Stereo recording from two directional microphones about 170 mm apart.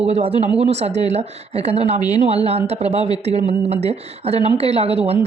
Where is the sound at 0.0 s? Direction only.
35° right (ahead or behind).